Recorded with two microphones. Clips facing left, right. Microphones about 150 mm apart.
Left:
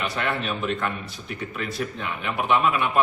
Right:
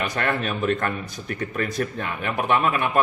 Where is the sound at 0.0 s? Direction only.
45° right (ahead or behind).